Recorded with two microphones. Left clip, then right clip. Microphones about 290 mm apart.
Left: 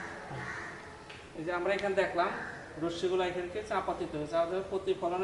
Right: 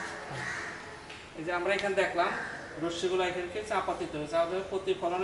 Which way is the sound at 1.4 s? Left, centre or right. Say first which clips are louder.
Right 2 dB; centre.